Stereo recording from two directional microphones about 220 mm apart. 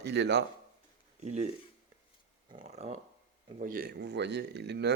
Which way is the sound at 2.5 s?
30° right (ahead or behind).